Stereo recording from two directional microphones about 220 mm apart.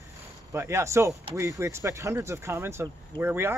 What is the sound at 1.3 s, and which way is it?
Speech, 15° right (ahead or behind).